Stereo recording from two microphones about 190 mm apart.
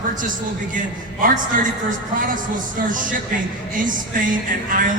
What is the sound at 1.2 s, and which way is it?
Speech, 45° right (ahead or behind).